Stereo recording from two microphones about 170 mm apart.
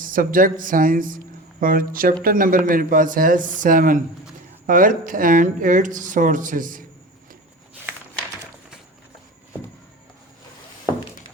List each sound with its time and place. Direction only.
0.0 s speech: 55° right (ahead or behind)